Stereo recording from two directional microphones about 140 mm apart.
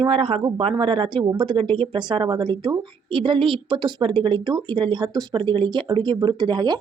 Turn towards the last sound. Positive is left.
turn(degrees=-30)  # may be behind; listen again after turning